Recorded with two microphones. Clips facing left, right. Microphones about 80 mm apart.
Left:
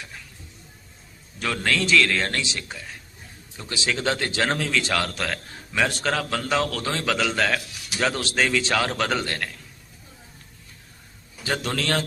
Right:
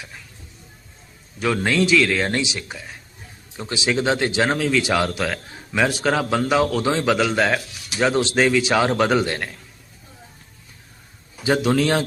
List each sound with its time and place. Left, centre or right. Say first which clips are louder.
1.6 s a man's voice: right 2 dB; centre
4.5 s a man's voice: right 5 dB; centre
11.4 s a man's voice: right 8 dB; centre